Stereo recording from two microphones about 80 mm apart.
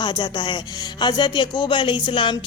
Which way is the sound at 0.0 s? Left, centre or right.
Left.